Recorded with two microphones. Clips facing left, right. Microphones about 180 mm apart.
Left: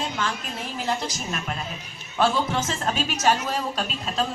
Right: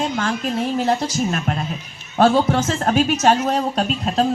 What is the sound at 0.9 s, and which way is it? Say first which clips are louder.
A woman's voice: right 8 dB; 45° right (ahead or behind).